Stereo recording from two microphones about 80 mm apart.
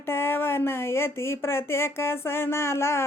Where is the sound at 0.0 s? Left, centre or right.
Left.